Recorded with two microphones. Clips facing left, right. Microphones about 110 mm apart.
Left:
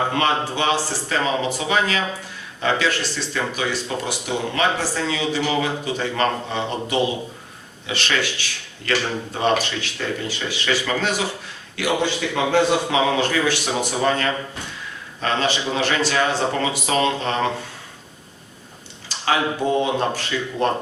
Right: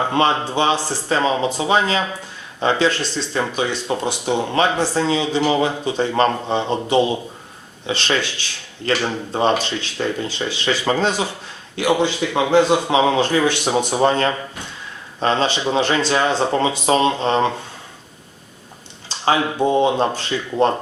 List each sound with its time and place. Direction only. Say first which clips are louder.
0.1 s speech: right 3 dB; 25° right (ahead or behind)
19.2 s speech: right 3 dB; 25° right (ahead or behind)